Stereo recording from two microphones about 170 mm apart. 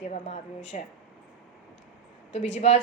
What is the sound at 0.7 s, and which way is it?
Speech, 45° left (ahead or behind).